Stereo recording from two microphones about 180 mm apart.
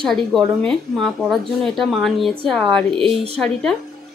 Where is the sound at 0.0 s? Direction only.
Centre (ahead or behind).